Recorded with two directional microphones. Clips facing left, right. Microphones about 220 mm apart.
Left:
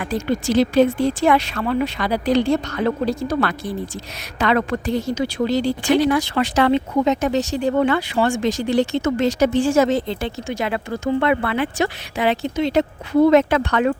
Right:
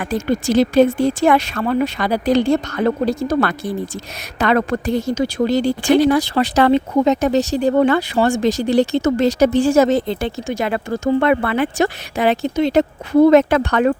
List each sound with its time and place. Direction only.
0.0 s a woman's voice: 45° right (ahead or behind)